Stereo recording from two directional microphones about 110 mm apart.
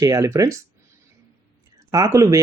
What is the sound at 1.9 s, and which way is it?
Speech, 30° right (ahead or behind).